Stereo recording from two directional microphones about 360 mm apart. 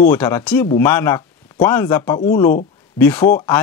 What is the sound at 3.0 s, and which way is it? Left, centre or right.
Speech, centre.